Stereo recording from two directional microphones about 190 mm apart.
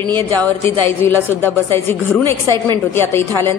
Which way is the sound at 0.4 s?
10° left (ahead or behind).